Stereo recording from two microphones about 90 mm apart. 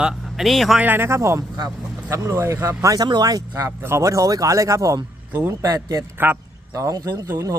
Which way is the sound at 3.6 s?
30° right (ahead or behind).